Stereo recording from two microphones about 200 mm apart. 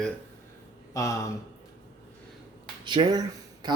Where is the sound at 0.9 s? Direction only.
15° left (ahead or behind).